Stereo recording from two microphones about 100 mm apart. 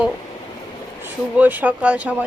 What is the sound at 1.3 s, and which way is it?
Speech, 15° right (ahead or behind).